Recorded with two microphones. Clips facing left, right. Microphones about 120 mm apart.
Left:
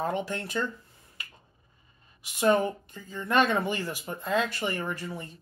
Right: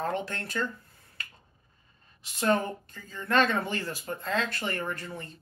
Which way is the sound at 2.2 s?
15° left (ahead or behind).